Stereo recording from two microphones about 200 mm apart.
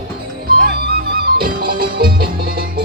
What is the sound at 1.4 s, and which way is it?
Music, 45° right (ahead or behind).